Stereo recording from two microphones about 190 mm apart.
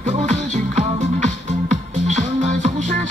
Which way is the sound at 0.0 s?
40° right (ahead or behind).